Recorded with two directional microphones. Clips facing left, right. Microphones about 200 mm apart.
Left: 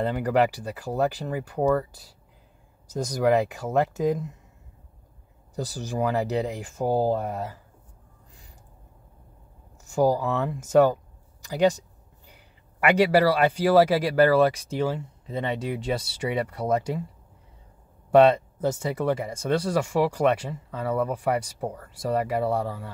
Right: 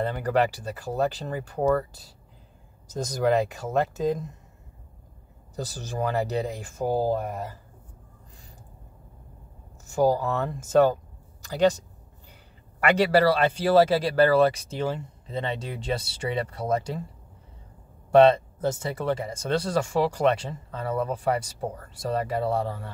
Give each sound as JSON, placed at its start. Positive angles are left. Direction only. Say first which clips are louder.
{"t": 0.0, "sound": "speech", "louder": "left 2 dB", "side_deg": 15}
{"t": 5.6, "sound": "speech", "louder": "left 2 dB", "side_deg": 15}
{"t": 9.9, "sound": "speech", "louder": "even", "side_deg": 10}
{"t": 12.8, "sound": "speech", "louder": "left 1 dB", "side_deg": 10}
{"t": 18.1, "sound": "speech", "louder": "even", "side_deg": 15}